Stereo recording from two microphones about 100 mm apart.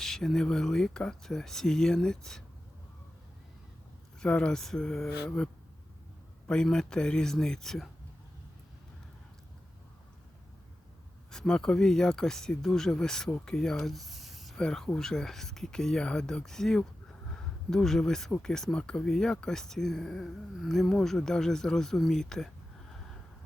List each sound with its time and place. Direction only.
0.0 s speech: 5° left (ahead or behind)
4.2 s speech: 10° left (ahead or behind)
6.5 s speech: 5° left (ahead or behind)
11.3 s speech: 5° left (ahead or behind)